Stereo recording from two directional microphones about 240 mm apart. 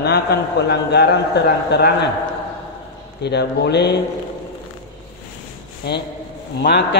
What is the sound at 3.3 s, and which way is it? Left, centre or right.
Speech, left.